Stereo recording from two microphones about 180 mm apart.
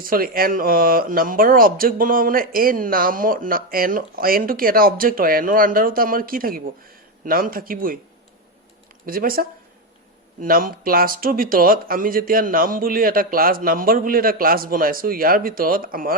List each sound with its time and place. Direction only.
0.0 s speech: 55° right (ahead or behind)
9.0 s speech: 55° right (ahead or behind)